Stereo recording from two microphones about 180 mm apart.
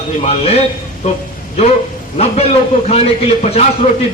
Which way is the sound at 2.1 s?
35° left (ahead or behind).